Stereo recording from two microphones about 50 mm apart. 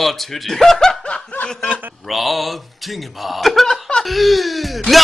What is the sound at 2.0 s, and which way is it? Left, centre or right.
Speech, centre.